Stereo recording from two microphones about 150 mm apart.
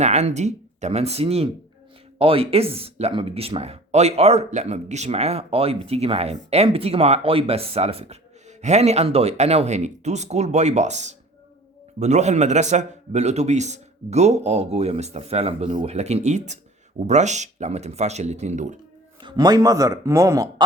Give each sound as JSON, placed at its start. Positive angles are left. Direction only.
{"t": 0.0, "sound": "speech", "side_deg": -50}
{"t": 19.2, "sound": "speech", "side_deg": -25}